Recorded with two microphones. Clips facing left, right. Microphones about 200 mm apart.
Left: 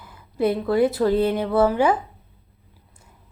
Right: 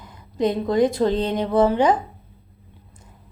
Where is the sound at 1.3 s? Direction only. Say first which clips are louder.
Right 1 dB; 20° right (ahead or behind).